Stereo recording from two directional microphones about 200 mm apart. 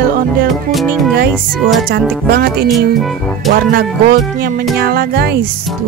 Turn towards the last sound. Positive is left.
turn(degrees=-50)  # may be behind; listen again after turning